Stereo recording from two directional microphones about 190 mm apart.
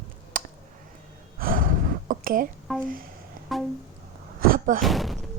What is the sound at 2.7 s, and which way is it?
Speech, centre (ahead or behind).